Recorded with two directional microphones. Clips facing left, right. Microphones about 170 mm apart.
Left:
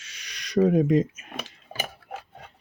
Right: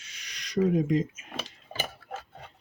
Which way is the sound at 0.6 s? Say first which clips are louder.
Left 4 dB; 70° left (ahead or behind).